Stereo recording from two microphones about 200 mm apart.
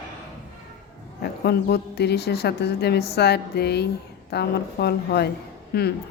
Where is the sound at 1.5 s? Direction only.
55° left (ahead or behind).